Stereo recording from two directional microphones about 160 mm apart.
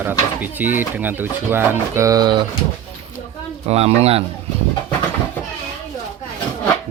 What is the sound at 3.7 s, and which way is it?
Speech, 40° right (ahead or behind).